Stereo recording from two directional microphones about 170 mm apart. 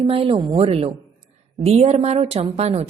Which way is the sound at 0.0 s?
35° right (ahead or behind).